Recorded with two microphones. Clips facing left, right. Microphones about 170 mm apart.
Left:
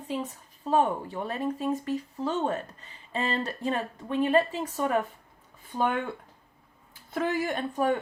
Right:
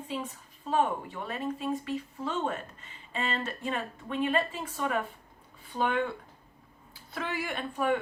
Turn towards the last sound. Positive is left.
turn(degrees=40)  # may be behind; listen again after turning